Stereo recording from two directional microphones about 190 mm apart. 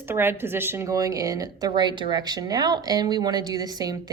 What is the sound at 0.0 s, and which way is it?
Speech, 10° right (ahead or behind).